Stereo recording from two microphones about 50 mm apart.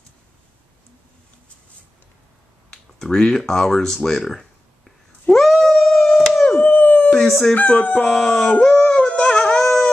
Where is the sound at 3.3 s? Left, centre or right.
Centre.